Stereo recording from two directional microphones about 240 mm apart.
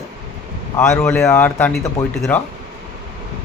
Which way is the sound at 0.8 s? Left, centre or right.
Centre.